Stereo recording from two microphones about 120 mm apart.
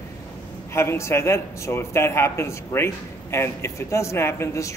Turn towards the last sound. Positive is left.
turn(degrees=25)  # may be behind; listen again after turning